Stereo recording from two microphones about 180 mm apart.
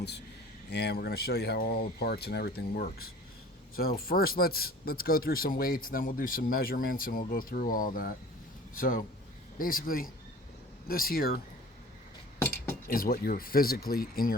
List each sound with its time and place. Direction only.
0.7 s a man's voice: 65° left (ahead or behind)
12.9 s speech: 55° left (ahead or behind)